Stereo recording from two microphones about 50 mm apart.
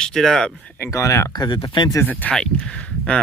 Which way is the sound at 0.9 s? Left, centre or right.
Left.